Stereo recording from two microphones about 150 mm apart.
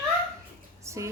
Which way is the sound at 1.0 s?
20° right (ahead or behind).